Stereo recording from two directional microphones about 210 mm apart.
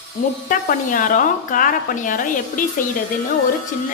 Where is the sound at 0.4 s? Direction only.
40° left (ahead or behind).